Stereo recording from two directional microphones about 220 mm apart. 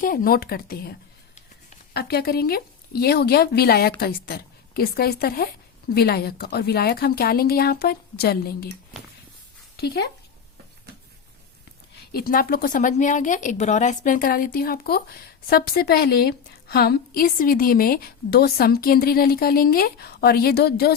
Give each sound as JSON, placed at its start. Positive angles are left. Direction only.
{"t": 0.0, "sound": "a woman's voice", "side_deg": 40}
{"t": 9.7, "sound": "speech", "side_deg": 45}
{"t": 12.1, "sound": "a woman's voice", "side_deg": 40}